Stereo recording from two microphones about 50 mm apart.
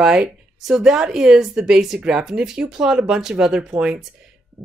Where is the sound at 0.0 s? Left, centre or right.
Centre.